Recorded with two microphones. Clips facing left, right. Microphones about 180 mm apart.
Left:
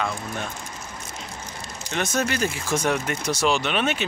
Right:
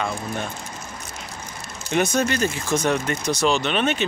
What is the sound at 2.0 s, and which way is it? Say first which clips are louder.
Speech: right 1 dB; 5° left (ahead or behind).